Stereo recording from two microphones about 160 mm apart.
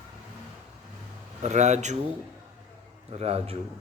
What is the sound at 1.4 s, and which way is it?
Speech, 45° right (ahead or behind).